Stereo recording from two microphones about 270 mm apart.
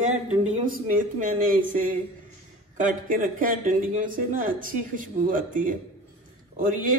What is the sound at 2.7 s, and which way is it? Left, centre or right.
A man's voice, right.